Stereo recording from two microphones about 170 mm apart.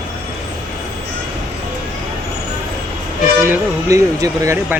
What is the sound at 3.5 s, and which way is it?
Speech, 20° right (ahead or behind).